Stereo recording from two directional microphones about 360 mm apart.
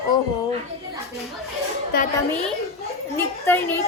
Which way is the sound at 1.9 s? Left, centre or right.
Left.